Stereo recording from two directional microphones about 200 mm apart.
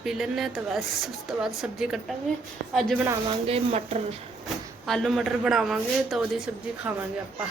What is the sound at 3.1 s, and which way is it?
Speech, 25° right (ahead or behind).